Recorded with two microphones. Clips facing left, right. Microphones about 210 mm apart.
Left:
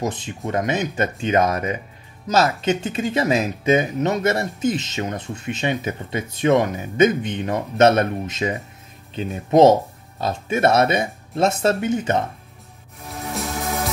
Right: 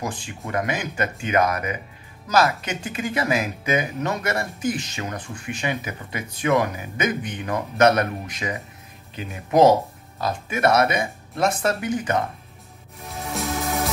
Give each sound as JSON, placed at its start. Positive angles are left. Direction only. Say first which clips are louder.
{"t": 0.0, "sound": "speech", "louder": "left 5 dB", "side_deg": 20}
{"t": 13.1, "sound": "music", "louder": "even", "side_deg": 0}